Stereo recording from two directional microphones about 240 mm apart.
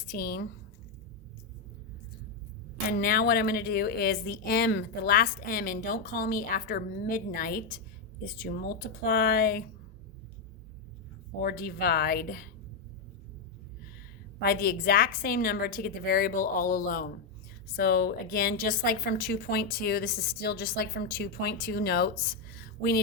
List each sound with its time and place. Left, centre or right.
0.1 s speech: left
3.0 s speech: left
11.3 s speech: left
14.4 s speech: left